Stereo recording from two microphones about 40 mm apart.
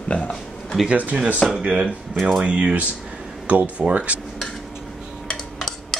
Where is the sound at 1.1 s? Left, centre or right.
Right.